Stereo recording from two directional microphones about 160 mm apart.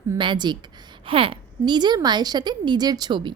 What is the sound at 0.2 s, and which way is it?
A woman's voice, 30° right (ahead or behind).